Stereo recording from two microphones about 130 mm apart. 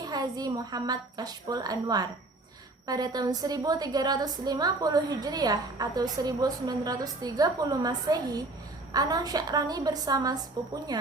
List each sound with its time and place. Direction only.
0.0 s a woman's voice: 30° right (ahead or behind)